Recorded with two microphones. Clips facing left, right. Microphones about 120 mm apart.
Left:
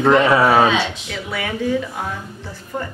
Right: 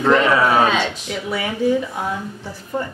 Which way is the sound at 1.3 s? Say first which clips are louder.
Right 2 dB; 20° right (ahead or behind).